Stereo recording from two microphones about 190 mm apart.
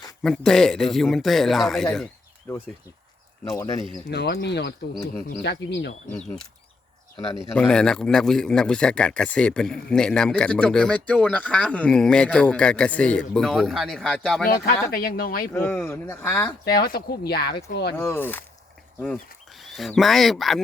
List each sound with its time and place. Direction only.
0.2 s speech: 5° left (ahead or behind)
2.5 s speech: 15° left (ahead or behind)
4.1 s speech: 60° left (ahead or behind)
6.1 s speech: 5° left (ahead or behind)
7.5 s speech: 5° left (ahead or behind)
14.9 s speech: 50° left (ahead or behind)
15.5 s speech: 10° left (ahead or behind)
16.5 s speech: 20° left (ahead or behind)
16.8 s speech: 55° left (ahead or behind)
17.9 s speech: 10° left (ahead or behind)